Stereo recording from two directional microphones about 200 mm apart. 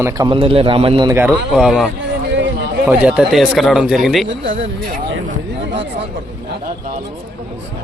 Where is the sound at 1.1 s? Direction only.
5° right (ahead or behind).